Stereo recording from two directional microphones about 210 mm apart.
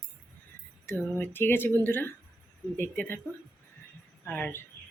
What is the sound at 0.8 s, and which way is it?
Speech, 10° left (ahead or behind).